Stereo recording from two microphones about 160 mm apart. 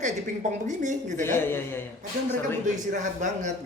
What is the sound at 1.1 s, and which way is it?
Speech, 15° left (ahead or behind).